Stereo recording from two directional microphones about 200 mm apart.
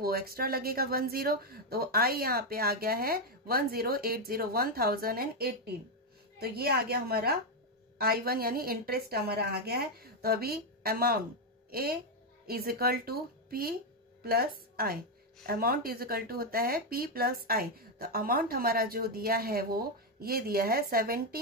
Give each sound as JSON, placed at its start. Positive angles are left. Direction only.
{"t": 0.0, "sound": "a woman's voice", "side_deg": -50}